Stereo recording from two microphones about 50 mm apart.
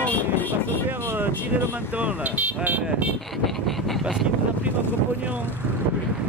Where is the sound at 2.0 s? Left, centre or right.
Right.